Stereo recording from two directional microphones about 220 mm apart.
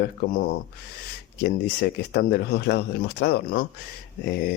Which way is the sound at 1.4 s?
45° left (ahead or behind).